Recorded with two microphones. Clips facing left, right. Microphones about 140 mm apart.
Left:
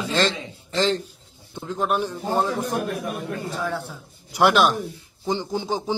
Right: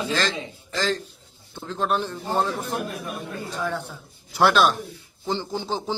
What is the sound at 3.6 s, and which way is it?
Speech, centre (ahead or behind).